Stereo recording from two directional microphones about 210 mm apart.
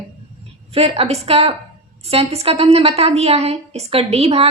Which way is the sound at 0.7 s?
30° right (ahead or behind).